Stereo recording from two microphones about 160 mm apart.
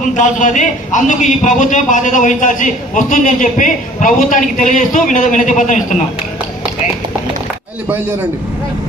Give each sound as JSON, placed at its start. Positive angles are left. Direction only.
{"t": 0.0, "sound": "a man's voice", "side_deg": 50}